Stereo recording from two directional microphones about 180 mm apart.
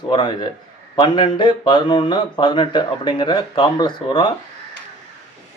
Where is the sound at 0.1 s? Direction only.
25° left (ahead or behind).